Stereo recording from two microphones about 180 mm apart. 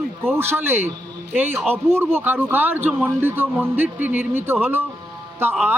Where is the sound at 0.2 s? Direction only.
15° right (ahead or behind).